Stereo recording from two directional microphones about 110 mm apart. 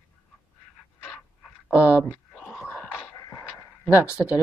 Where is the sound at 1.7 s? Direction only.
15° right (ahead or behind).